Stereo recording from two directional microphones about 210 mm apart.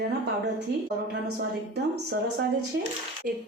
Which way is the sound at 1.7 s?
50° right (ahead or behind).